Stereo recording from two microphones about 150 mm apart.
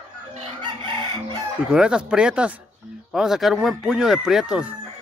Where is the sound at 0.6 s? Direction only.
30° right (ahead or behind).